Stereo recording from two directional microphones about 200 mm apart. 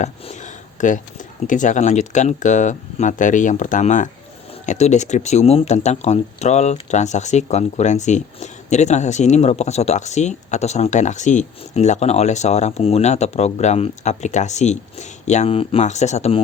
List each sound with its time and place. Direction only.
0.0 s speech: 35° left (ahead or behind)